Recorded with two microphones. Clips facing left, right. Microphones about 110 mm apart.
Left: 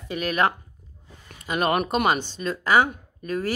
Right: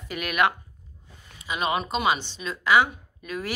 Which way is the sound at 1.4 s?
50° left (ahead or behind).